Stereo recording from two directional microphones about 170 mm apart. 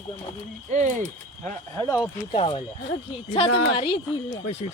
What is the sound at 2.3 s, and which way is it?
A woman's voice, 30° left (ahead or behind).